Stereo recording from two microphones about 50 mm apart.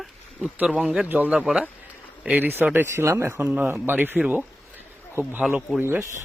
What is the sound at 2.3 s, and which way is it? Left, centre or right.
Speech, right.